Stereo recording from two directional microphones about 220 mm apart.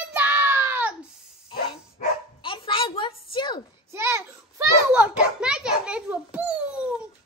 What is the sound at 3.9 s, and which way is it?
Children playing, 10° right (ahead or behind).